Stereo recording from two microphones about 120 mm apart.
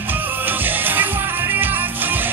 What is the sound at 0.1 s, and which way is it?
Music, 15° right (ahead or behind).